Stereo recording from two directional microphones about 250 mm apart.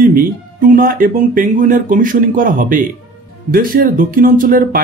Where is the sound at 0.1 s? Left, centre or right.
Right.